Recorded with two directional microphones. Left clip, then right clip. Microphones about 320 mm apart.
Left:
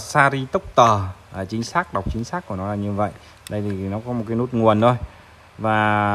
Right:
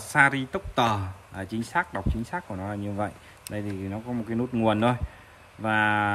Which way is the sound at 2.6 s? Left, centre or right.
Right.